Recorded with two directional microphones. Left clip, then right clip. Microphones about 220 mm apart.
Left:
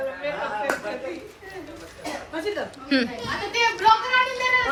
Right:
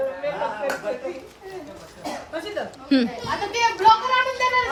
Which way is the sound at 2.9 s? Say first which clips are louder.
Right 2 dB; 15° right (ahead or behind).